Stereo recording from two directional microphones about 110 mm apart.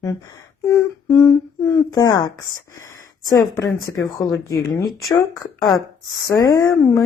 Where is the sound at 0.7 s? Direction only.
30° left (ahead or behind).